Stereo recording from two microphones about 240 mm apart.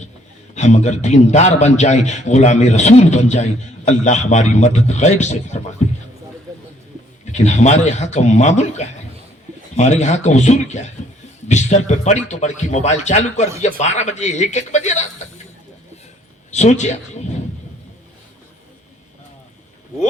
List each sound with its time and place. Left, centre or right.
0.5 s a man's voice: left
7.3 s a man's voice: left
16.5 s a man's voice: left